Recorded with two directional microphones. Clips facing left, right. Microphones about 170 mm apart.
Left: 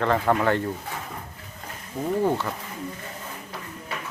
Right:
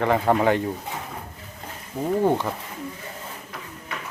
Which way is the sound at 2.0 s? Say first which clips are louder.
Right 2 dB; 15° right (ahead or behind).